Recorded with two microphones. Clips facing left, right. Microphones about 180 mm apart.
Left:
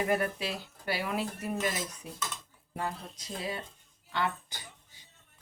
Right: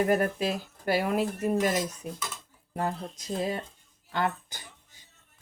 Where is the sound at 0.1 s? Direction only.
45° right (ahead or behind).